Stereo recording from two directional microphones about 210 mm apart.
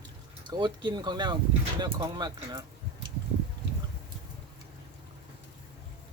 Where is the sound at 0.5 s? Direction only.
20° right (ahead or behind).